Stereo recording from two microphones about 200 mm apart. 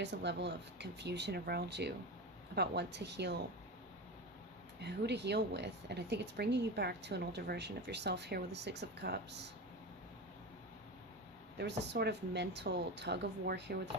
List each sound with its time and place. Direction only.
0.0 s speech: 60° right (ahead or behind)
4.8 s speech: 55° right (ahead or behind)
11.8 s speech: 55° right (ahead or behind)